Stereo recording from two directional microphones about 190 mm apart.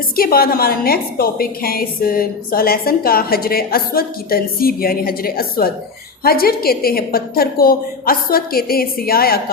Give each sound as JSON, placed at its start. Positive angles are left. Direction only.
{"t": 0.2, "sound": "a woman's voice", "side_deg": 50}